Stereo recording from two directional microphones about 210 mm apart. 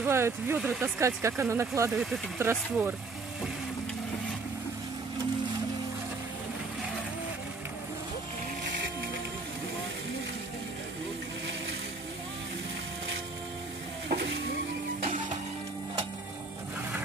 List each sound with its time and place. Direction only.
0.0 s speech: 10° right (ahead or behind)
14.0 s stir: 50° right (ahead or behind)